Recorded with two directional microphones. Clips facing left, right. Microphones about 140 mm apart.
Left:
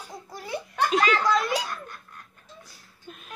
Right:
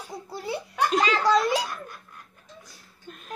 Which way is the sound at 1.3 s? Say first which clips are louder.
Right 3 dB; 35° right (ahead or behind).